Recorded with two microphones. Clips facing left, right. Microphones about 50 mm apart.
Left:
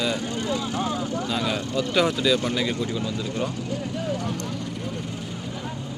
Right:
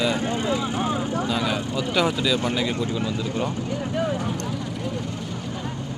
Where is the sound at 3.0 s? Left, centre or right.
Right.